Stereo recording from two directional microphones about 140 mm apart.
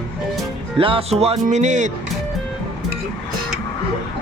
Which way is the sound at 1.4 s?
60° right (ahead or behind).